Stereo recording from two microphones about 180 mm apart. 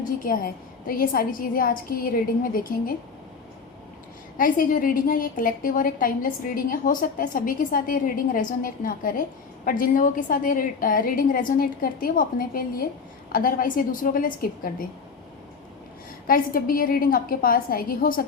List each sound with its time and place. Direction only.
0.0 s a woman's voice: 50° left (ahead or behind)
4.4 s a woman's voice: 50° left (ahead or behind)
16.2 s a woman's voice: 50° left (ahead or behind)